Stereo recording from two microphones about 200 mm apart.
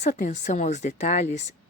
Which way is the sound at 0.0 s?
35° left (ahead or behind).